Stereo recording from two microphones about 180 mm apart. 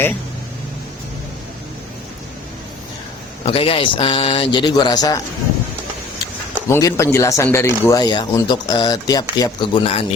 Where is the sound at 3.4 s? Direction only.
30° left (ahead or behind).